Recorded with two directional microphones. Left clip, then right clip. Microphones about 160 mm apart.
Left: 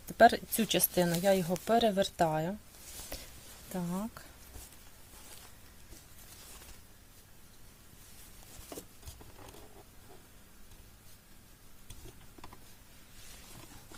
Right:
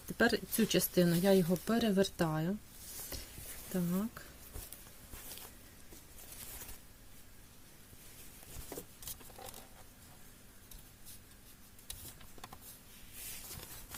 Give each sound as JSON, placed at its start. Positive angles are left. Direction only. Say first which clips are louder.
{"t": 0.3, "sound": "speech", "louder": "left 5 dB", "side_deg": 40}
{"t": 3.7, "sound": "speech", "louder": "even", "side_deg": 35}